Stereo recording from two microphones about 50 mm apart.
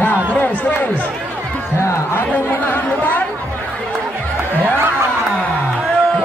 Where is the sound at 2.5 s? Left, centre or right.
Left.